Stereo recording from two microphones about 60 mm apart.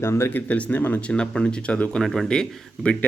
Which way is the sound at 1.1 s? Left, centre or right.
Centre.